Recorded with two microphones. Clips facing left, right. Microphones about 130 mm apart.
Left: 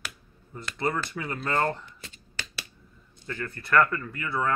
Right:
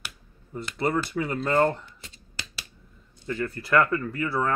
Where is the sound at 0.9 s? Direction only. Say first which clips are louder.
Right 5 dB; 20° right (ahead or behind).